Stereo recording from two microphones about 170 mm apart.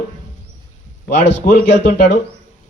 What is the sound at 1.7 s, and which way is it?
Speech, 90° left.